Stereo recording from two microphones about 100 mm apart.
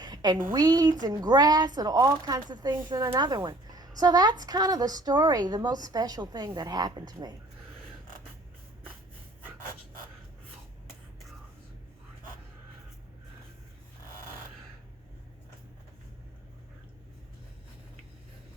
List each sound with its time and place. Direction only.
0.0 s a sound: 40° right (ahead or behind)
0.5 s speech: 40° right (ahead or behind)
2.7 s speech: 30° right (ahead or behind)